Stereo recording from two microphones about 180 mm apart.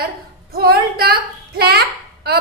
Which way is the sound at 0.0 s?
60° right (ahead or behind).